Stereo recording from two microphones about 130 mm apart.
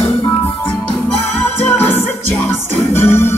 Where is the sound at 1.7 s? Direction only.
15° left (ahead or behind).